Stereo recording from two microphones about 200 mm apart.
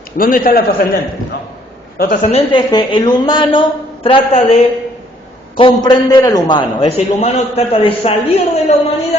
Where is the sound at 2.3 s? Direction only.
25° left (ahead or behind).